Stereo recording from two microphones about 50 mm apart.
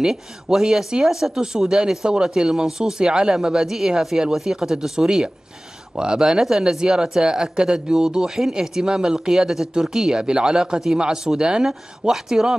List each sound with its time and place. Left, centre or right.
0.0 s speech: centre